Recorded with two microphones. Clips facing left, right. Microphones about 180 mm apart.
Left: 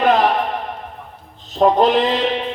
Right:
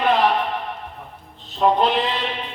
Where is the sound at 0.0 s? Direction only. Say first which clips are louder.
Left 4 dB; 45° left (ahead or behind).